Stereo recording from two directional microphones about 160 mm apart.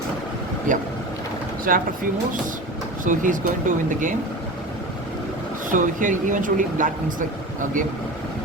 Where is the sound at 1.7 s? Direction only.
65° right (ahead or behind).